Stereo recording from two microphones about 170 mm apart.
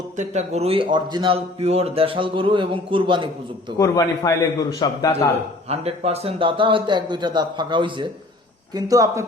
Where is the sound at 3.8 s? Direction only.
20° left (ahead or behind).